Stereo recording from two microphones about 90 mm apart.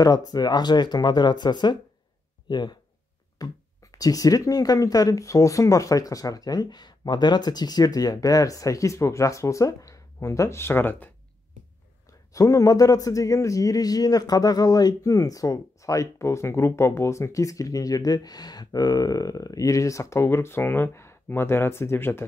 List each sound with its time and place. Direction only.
0.0 s speech: 45° left (ahead or behind)
3.4 s speech: 45° left (ahead or behind); by 11.1 s 25° left (ahead or behind)
12.3 s speech: 40° left (ahead or behind)